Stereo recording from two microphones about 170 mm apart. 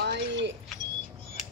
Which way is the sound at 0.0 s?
90° right.